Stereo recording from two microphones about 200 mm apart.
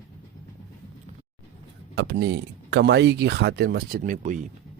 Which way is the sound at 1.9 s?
55° right (ahead or behind).